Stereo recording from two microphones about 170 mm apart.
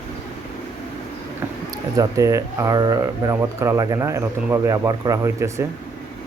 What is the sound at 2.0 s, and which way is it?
Speech, 20° right (ahead or behind).